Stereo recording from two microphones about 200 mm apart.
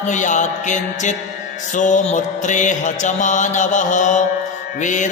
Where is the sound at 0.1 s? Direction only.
40° left (ahead or behind).